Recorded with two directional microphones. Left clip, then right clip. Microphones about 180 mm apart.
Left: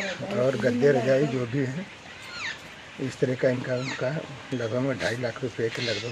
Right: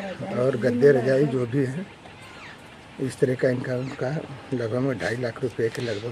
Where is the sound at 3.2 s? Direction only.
30° right (ahead or behind).